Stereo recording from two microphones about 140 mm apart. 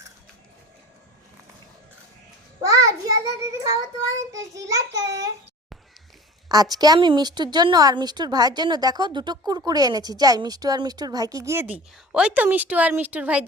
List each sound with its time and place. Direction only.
2.6 s child singing: 25° right (ahead or behind)
4.3 s a woman's voice: 20° right (ahead or behind)
6.5 s a woman's voice: 25° right (ahead or behind); by 13.4 s 10° right (ahead or behind)